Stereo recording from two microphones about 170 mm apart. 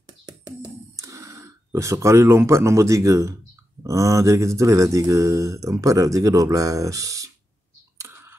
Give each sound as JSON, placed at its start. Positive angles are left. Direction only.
{"t": 0.3, "sound": "a sound", "side_deg": -20}
{"t": 3.8, "sound": "speech", "side_deg": -20}
{"t": 8.0, "sound": "computer keyboard", "side_deg": -15}